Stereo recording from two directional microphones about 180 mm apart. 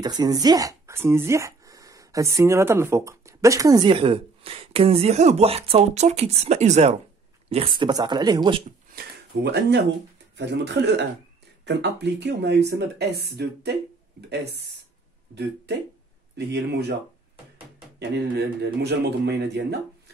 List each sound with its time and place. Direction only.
0.0 s speech: 20° right (ahead or behind)
8.9 s speech: 70° right (ahead or behind)
17.9 s speech: 70° right (ahead or behind)